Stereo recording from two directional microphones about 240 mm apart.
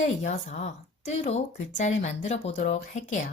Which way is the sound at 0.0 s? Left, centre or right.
Left.